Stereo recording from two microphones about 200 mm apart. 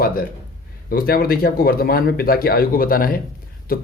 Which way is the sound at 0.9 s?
50° left (ahead or behind).